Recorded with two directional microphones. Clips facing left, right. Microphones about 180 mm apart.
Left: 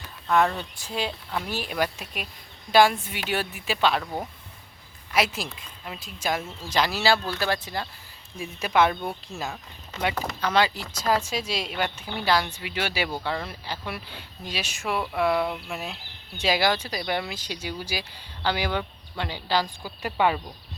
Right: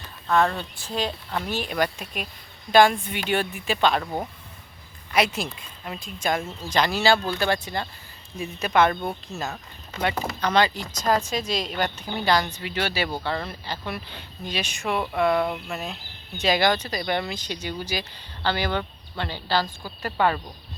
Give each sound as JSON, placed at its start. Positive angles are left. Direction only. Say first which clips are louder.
{"t": 0.3, "sound": "speech", "louder": "right 1 dB", "side_deg": 15}
{"t": 4.0, "sound": "speech", "louder": "right 2 dB", "side_deg": -10}
{"t": 5.1, "sound": "speech", "louder": "right 2 dB", "side_deg": 0}
{"t": 11.8, "sound": "speech", "louder": "right 2 dB", "side_deg": -40}
{"t": 12.2, "sound": "speech", "louder": "right 1 dB", "side_deg": 5}